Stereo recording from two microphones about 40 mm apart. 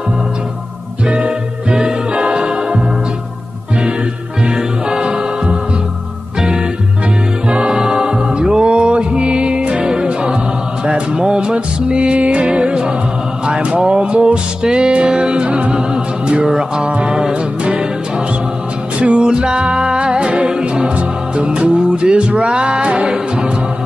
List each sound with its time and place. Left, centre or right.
1.0 s music: right
4.6 s music: centre
7.4 s music: right
19.1 s music: right